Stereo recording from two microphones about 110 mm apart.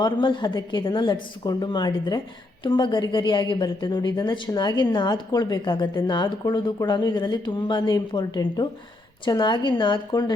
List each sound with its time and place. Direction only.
0.0 s a woman's voice: 45° left (ahead or behind)